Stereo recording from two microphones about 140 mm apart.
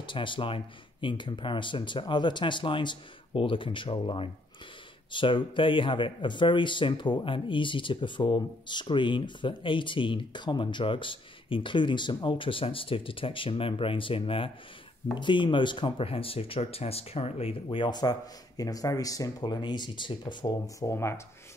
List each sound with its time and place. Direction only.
0.0 s speech: 35° left (ahead or behind); by 21.2 s 20° left (ahead or behind)